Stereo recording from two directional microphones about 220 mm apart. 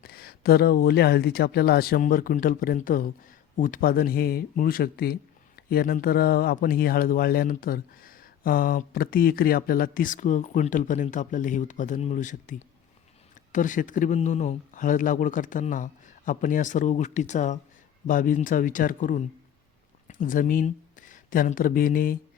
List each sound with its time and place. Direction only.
0.0 s speech: 45° left (ahead or behind)